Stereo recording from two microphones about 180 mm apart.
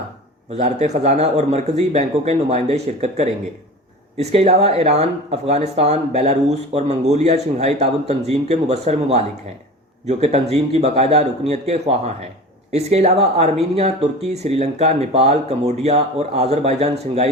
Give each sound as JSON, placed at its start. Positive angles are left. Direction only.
{"t": 0.5, "sound": "speech", "side_deg": -40}